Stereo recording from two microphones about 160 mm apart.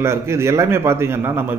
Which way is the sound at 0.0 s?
15° right (ahead or behind).